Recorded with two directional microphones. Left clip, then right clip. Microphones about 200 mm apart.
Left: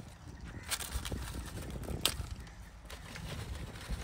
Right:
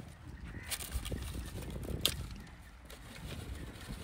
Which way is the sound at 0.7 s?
5° left (ahead or behind).